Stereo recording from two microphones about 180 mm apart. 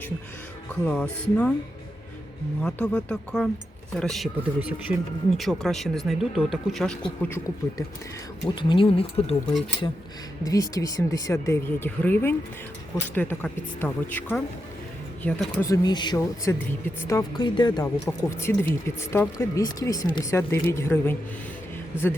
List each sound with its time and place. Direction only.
0.9 s speech: 5° left (ahead or behind)
2.6 s speech: 5° left (ahead or behind)
7.2 s speech: 15° left (ahead or behind)
8.4 s speech: 25° left (ahead or behind)
10.4 s speech: 20° left (ahead or behind)
15.6 s speech: 20° left (ahead or behind)